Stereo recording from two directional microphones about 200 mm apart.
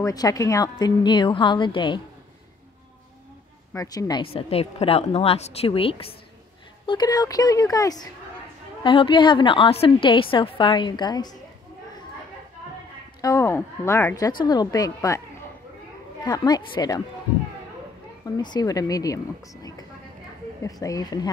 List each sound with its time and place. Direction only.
0.0 s a woman's voice: 20° left (ahead or behind)
3.7 s a woman's voice: 15° left (ahead or behind)
13.2 s a woman's voice: 15° left (ahead or behind)
16.3 s a woman's voice: 20° left (ahead or behind)
18.2 s speech: 20° left (ahead or behind)